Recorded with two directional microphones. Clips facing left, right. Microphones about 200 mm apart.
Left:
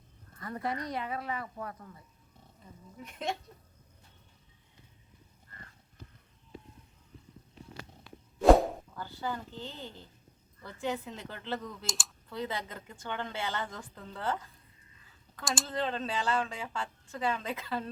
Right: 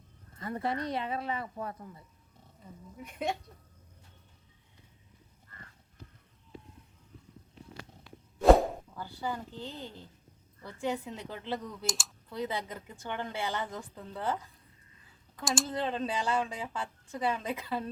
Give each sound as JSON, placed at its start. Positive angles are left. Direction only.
{"t": 0.3, "sound": "speech", "side_deg": -25}
{"t": 8.4, "sound": "whip", "side_deg": 0}
{"t": 9.0, "sound": "speech", "side_deg": -10}
{"t": 11.9, "sound": "speech", "side_deg": 0}
{"t": 12.3, "sound": "speech", "side_deg": -10}
{"t": 15.6, "sound": "speech", "side_deg": -10}